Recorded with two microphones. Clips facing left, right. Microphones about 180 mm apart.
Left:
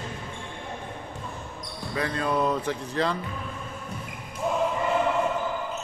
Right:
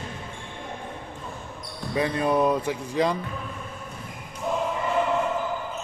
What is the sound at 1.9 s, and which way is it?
Speech, 20° right (ahead or behind).